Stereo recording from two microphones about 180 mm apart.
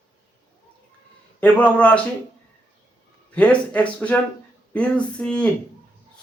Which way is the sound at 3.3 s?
5° left (ahead or behind).